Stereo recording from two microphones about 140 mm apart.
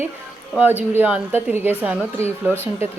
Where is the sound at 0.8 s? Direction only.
10° right (ahead or behind).